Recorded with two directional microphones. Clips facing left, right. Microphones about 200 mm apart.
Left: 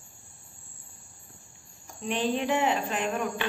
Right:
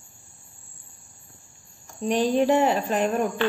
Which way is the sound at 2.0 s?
40° right (ahead or behind).